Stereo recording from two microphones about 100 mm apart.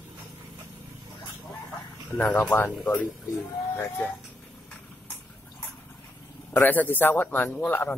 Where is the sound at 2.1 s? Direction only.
15° left (ahead or behind).